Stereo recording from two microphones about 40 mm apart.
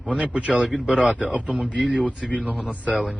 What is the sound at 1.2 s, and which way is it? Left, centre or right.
Speech, right.